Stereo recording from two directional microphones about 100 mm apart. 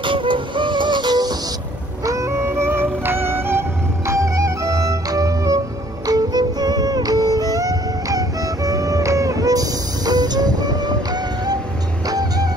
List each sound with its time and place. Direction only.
0.0 s music: 55° right (ahead or behind)
2.0 s music: 30° right (ahead or behind)
12.1 s music: 40° right (ahead or behind)